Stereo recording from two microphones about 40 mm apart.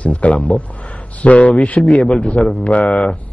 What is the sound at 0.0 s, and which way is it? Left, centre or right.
Speech, left.